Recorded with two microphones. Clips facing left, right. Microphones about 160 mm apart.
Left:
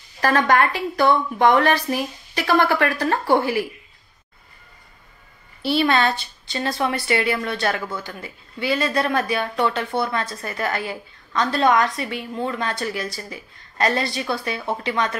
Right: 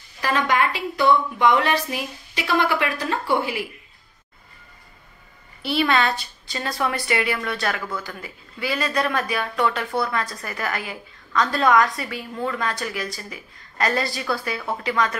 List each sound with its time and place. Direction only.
0.2 s a woman's voice: 50° left (ahead or behind)
5.6 s a woman's voice: 30° left (ahead or behind)